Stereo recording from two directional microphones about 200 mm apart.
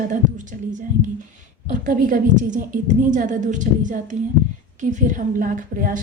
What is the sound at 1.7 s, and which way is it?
A woman's voice, 40° right (ahead or behind).